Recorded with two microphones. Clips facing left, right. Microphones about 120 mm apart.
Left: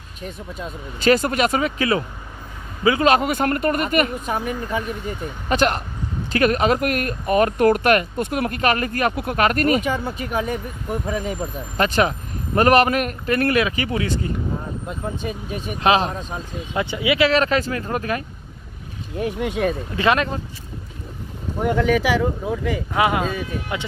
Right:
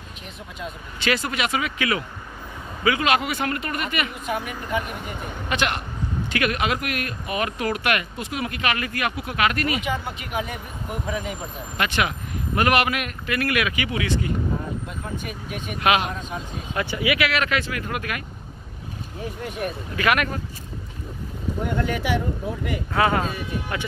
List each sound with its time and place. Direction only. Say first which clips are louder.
0.6 s speech: left 3 dB; 40° left (ahead or behind)
16.7 s speech: left 3 dB; 20° left (ahead or behind)
19.1 s speech: left 8 dB; 85° left
20.0 s speech: left 3 dB; 25° left (ahead or behind)
21.7 s speech: left 6 dB; 90° left
22.9 s speech: left 1 dB; 15° left (ahead or behind)